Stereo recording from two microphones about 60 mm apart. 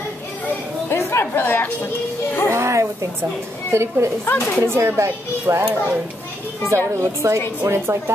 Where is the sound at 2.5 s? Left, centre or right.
Right.